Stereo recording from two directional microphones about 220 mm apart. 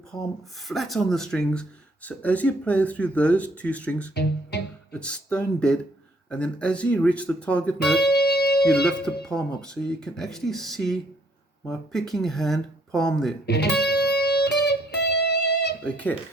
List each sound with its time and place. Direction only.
0.7 s speech: centre (ahead or behind)
4.1 s speech: 50° left (ahead or behind)
4.9 s speech: 5° left (ahead or behind)
8.0 s music: 45° left (ahead or behind)
8.6 s speech: 5° left (ahead or behind)
13.4 s music: 50° left (ahead or behind)
15.8 s speech: 5° left (ahead or behind)